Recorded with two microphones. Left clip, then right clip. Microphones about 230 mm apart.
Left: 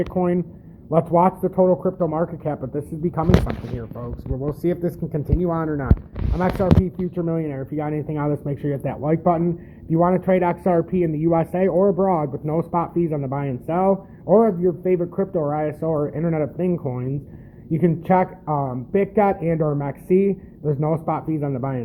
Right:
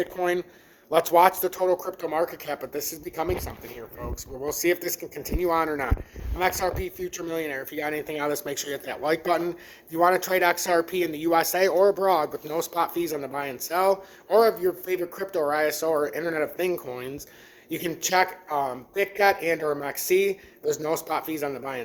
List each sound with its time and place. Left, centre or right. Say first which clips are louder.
0.2 s speech: left 3 dB; right
4.4 s speech: left 1 dB; centre